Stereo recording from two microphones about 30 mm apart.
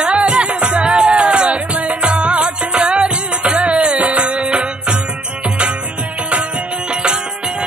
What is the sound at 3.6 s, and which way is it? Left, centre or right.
Music, right.